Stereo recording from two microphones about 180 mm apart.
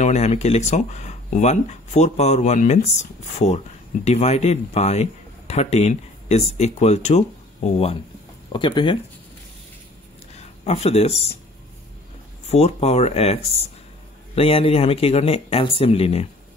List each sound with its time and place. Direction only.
0.0 s speech: 40° left (ahead or behind)
10.3 s speech: 35° left (ahead or behind)
12.4 s speech: 35° left (ahead or behind)